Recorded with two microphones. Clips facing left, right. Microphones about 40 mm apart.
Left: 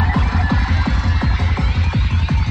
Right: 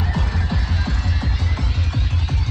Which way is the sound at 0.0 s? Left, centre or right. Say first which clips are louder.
Left 6 dB; left.